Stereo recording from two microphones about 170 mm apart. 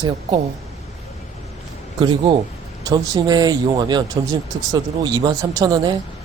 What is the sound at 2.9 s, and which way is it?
Speech, 25° right (ahead or behind).